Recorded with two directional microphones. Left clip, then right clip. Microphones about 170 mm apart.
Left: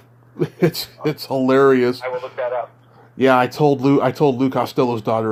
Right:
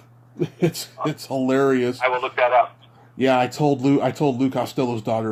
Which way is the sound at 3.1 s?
10° left (ahead or behind).